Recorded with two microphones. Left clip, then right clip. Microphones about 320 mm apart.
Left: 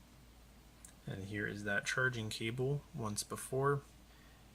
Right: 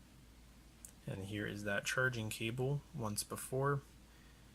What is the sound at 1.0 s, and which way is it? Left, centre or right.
Speech, centre.